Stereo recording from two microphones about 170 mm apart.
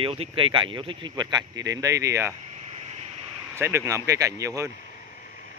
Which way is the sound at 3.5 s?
15° right (ahead or behind).